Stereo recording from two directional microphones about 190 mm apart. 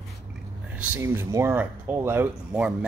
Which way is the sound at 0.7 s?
15° right (ahead or behind).